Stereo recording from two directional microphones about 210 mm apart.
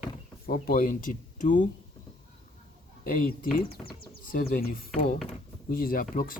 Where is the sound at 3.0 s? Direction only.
45° left (ahead or behind).